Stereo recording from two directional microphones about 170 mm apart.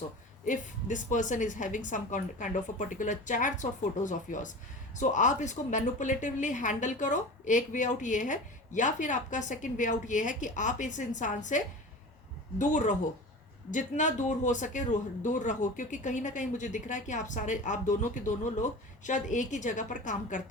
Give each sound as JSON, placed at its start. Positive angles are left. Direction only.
{"t": 0.4, "sound": "a man's voice", "side_deg": 50}